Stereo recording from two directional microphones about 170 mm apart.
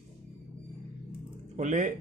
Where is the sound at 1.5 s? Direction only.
45° right (ahead or behind).